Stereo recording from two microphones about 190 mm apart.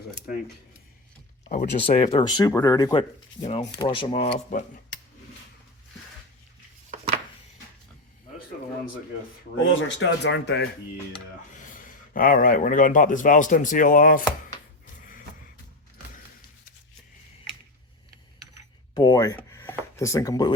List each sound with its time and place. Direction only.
1.5 s speech: 35° left (ahead or behind)
2.2 s speech: 20° left (ahead or behind)
3.4 s speech: 30° left (ahead or behind)
9.6 s speech: 75° left (ahead or behind)
11.5 s speech: 45° left (ahead or behind)
18.9 s speech: 20° left (ahead or behind)